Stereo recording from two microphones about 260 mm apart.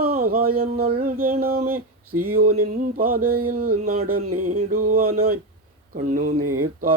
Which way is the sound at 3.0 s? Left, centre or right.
Right.